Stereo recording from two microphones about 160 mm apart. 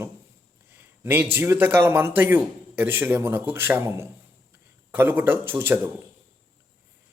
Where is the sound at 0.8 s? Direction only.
15° right (ahead or behind).